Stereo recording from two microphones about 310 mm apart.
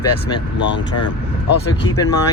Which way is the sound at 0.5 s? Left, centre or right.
Left.